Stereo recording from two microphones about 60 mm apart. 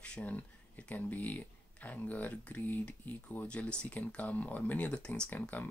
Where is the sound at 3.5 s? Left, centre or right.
Centre.